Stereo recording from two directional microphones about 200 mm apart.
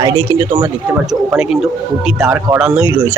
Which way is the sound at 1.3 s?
5° right (ahead or behind).